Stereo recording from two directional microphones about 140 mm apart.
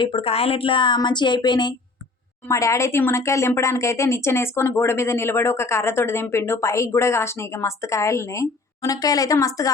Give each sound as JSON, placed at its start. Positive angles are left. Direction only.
{"t": 0.0, "sound": "speech", "side_deg": 40}
{"t": 2.5, "sound": "speech", "side_deg": 20}